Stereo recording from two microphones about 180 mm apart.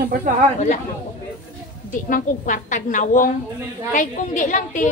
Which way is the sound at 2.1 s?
45° left (ahead or behind).